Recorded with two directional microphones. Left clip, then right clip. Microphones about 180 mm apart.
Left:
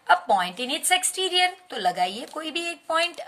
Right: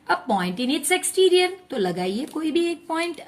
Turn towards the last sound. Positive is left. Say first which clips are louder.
# left 2 dB
turn(degrees=35)  # may be behind; listen again after turning